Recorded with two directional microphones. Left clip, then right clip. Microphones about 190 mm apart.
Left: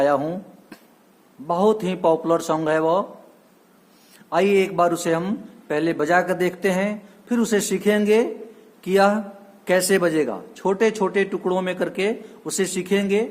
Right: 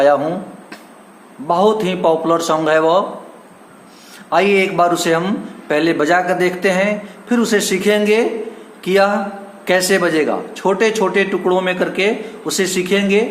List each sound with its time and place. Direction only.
0.0 s speech: 45° left (ahead or behind)
1.5 s speech: 40° left (ahead or behind)
4.3 s speech: 45° left (ahead or behind)